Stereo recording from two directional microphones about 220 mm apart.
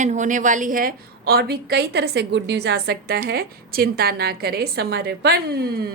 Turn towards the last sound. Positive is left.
turn(degrees=-45)  # may be behind; listen again after turning